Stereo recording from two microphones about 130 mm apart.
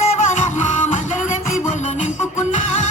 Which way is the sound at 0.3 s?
70° left (ahead or behind).